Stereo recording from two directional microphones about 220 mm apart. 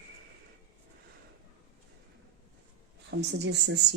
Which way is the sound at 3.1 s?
50° right (ahead or behind).